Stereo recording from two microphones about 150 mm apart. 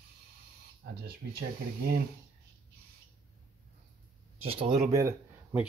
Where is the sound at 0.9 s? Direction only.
90° right.